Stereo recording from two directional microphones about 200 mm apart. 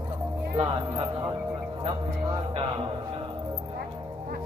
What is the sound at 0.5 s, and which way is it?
Speech, 30° right (ahead or behind).